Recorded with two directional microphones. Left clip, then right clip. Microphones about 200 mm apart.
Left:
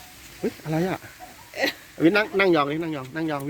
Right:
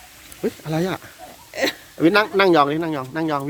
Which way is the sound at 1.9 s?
10° right (ahead or behind).